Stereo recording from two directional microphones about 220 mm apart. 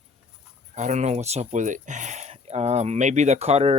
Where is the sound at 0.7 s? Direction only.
30° right (ahead or behind).